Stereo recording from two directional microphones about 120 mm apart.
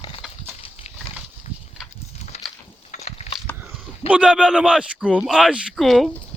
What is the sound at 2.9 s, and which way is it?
Wood, 65° left (ahead or behind).